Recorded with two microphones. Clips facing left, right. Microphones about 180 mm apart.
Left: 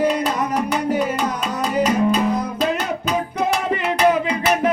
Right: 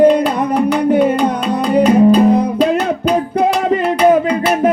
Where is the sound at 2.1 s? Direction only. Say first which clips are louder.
Right 9 dB; 35° right (ahead or behind).